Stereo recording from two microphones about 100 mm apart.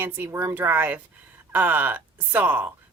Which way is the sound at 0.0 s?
20° right (ahead or behind).